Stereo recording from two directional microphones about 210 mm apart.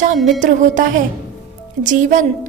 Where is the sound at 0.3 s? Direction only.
35° right (ahead or behind).